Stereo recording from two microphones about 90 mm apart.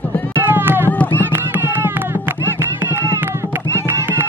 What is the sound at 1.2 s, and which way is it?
Music, 25° right (ahead or behind).